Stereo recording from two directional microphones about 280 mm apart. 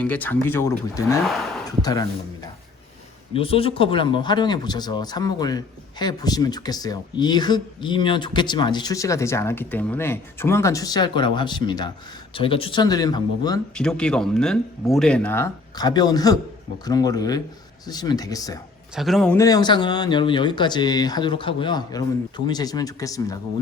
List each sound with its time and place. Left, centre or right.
0.0 s speech: centre
3.3 s speech: centre
13.7 s speech: centre
18.9 s speech: centre